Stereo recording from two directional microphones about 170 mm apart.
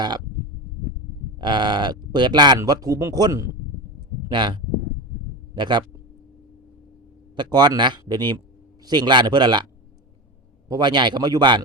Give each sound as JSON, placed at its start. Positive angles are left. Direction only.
{"t": 1.4, "sound": "speech", "side_deg": -25}
{"t": 5.5, "sound": "speech", "side_deg": -25}
{"t": 7.3, "sound": "speech", "side_deg": -25}
{"t": 10.7, "sound": "speech", "side_deg": -25}